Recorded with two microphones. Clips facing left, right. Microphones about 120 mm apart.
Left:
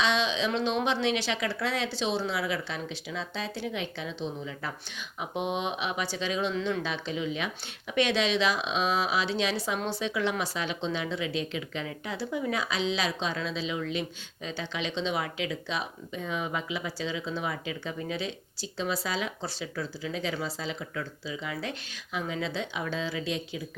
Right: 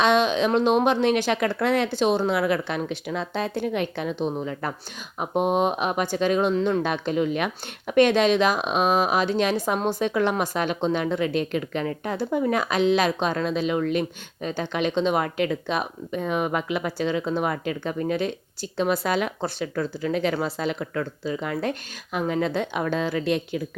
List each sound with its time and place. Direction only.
0.0 s speech: 50° right (ahead or behind)
5.2 s speech: 45° right (ahead or behind)
6.8 s speech: 55° right (ahead or behind)